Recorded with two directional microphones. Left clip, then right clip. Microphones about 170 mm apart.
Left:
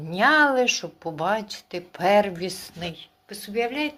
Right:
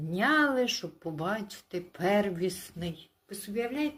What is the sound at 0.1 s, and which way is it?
Speech, 15° right (ahead or behind).